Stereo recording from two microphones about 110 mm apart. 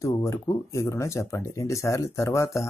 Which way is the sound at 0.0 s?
25° left (ahead or behind).